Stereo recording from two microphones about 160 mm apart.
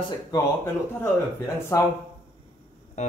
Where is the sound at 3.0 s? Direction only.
45° left (ahead or behind).